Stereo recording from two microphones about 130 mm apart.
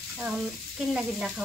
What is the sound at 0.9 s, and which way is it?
Speech, 5° right (ahead or behind).